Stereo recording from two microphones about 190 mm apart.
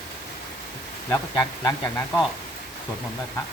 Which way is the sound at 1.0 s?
15° left (ahead or behind).